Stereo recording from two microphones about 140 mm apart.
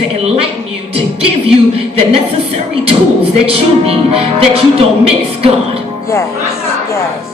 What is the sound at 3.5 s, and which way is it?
A woman's voice, 45° right (ahead or behind).